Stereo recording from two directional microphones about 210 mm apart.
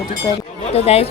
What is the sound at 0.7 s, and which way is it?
Speech, 30° left (ahead or behind).